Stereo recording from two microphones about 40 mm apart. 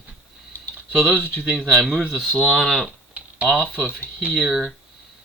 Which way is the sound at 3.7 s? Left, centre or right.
Right.